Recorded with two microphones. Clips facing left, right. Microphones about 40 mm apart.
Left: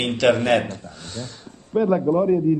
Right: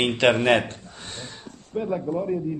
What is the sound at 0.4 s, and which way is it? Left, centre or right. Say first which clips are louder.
Speech: left 1 dB; right.